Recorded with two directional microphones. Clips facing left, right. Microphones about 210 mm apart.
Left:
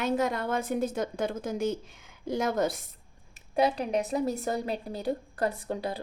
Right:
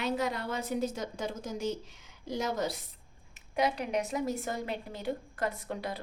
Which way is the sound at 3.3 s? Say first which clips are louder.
Left 4 dB; 35° left (ahead or behind).